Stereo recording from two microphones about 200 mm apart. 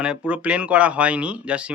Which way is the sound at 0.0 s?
5° right (ahead or behind).